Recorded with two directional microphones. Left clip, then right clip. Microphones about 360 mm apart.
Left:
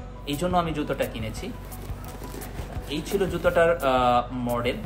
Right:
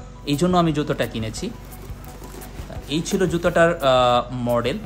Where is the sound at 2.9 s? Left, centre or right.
Right.